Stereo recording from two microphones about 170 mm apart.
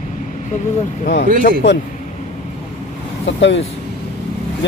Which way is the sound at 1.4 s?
60° left (ahead or behind).